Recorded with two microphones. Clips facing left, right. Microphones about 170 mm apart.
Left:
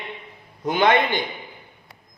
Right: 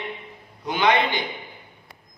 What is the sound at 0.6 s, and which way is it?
Speech, 50° left (ahead or behind).